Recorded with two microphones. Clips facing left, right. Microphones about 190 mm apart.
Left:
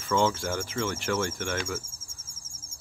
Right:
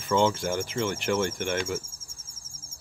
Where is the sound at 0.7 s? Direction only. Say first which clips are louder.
Right 1 dB; 20° right (ahead or behind).